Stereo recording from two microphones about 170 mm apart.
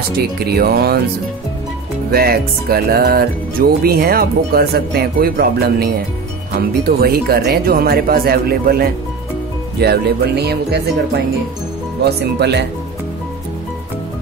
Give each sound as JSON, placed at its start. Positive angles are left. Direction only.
{"t": 0.5, "sound": "speech", "side_deg": -65}
{"t": 2.0, "sound": "music", "side_deg": -65}
{"t": 9.8, "sound": "speech", "side_deg": -70}